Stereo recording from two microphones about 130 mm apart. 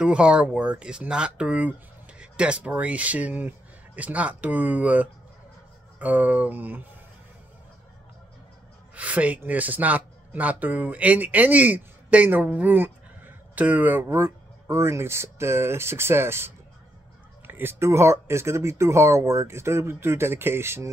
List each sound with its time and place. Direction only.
0.0 s speech: 5° right (ahead or behind)
8.9 s speech: 10° right (ahead or behind)